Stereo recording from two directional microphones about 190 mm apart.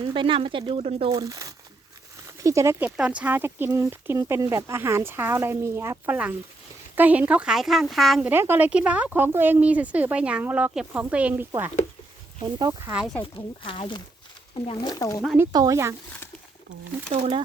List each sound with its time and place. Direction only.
0.0 s speech: 25° right (ahead or behind)
1.1 s speech: 20° right (ahead or behind); by 8.3 s centre (ahead or behind)
8.3 s speech: 10° right (ahead or behind)
12.5 s speech: 20° right (ahead or behind)
13.2 s speech: 25° left (ahead or behind)
15.4 s speech: 15° right (ahead or behind)
17.1 s speech: 30° right (ahead or behind)